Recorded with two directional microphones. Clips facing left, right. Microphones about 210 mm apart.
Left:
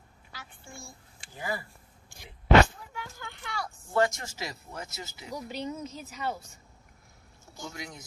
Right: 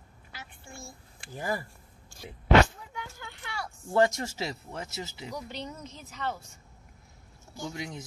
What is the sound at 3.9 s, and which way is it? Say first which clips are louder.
Speech: right 2 dB; 25° right (ahead or behind).